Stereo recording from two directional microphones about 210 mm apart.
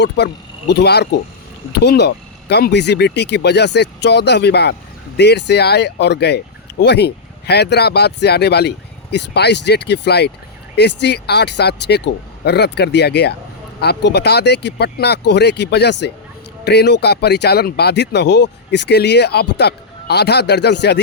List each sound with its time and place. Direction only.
0.2 s speech: 55° left (ahead or behind)